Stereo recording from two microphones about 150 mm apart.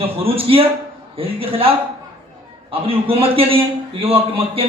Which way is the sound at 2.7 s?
40° right (ahead or behind).